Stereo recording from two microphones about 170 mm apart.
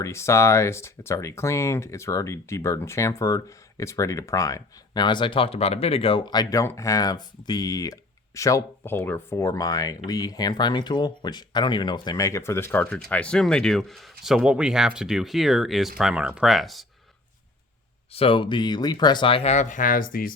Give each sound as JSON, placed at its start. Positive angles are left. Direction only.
{"t": 0.0, "sound": "speech", "side_deg": 15}
{"t": 18.1, "sound": "speech", "side_deg": 35}